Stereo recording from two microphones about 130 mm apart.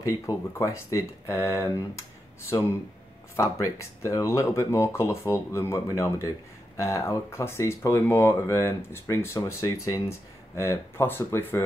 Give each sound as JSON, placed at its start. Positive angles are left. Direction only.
{"t": 0.0, "sound": "speech", "side_deg": 25}
{"t": 3.3, "sound": "speech", "side_deg": 25}